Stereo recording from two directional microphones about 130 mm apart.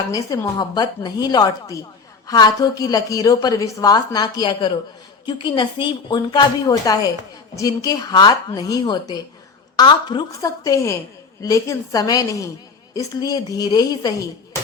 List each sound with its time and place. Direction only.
0.1 s a woman's voice: 25° left (ahead or behind)